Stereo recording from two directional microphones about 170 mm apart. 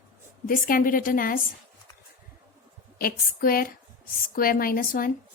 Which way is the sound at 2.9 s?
60° left (ahead or behind).